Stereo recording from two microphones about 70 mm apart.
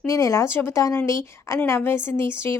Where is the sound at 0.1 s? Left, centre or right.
Left.